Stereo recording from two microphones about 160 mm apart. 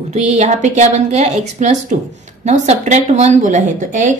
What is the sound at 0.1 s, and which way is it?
A woman's voice, 45° right (ahead or behind).